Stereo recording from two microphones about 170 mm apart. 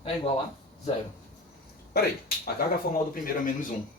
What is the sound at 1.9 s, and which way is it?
Speech, 65° left (ahead or behind).